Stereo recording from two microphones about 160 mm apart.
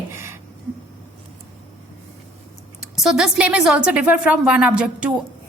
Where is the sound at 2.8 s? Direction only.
5° right (ahead or behind).